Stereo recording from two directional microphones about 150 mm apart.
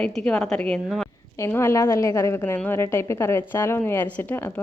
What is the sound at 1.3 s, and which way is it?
A woman's voice, 20° left (ahead or behind).